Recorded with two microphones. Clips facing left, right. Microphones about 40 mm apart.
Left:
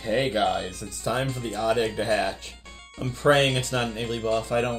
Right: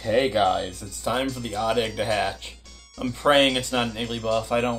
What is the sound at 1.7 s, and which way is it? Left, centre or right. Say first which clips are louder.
Speech: even; right.